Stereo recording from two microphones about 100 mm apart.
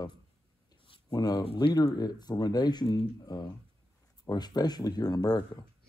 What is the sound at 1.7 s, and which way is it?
Speech, 40° left (ahead or behind).